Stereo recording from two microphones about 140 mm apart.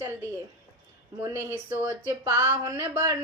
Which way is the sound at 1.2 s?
20° right (ahead or behind).